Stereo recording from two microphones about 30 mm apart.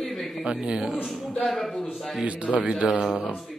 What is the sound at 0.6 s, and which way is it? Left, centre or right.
Speech, right.